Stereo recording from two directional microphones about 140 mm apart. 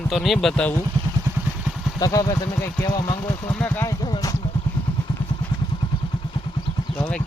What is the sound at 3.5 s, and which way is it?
Speech, 10° left (ahead or behind).